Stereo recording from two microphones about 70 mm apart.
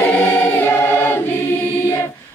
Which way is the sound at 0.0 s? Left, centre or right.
Left.